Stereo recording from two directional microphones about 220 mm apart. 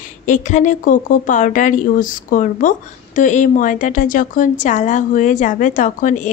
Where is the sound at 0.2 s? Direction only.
35° left (ahead or behind).